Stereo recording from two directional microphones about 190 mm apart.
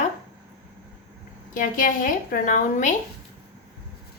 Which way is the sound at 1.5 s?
45° left (ahead or behind).